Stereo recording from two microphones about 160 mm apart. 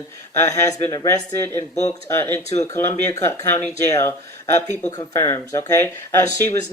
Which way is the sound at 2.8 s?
15° left (ahead or behind).